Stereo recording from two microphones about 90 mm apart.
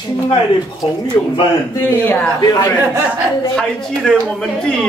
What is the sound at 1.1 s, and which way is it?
Speech, 45° left (ahead or behind).